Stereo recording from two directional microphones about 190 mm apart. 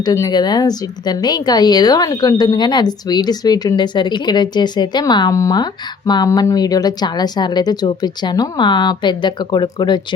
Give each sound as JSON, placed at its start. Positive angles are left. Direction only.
{"t": 0.0, "sound": "a woman's voice", "side_deg": 20}